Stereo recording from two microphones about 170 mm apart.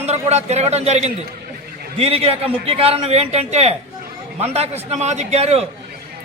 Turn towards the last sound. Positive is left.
turn(degrees=-40)  # may be behind; listen again after turning